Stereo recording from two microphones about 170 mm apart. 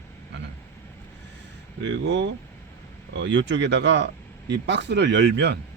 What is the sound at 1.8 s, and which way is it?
Speech, 90° right.